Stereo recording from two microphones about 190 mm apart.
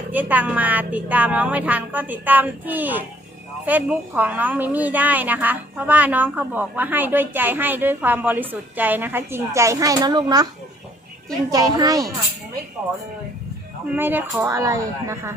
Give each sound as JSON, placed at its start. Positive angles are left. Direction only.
{"t": 0.1, "sound": "a woman's voice", "side_deg": -10}
{"t": 13.9, "sound": "a woman's voice", "side_deg": -10}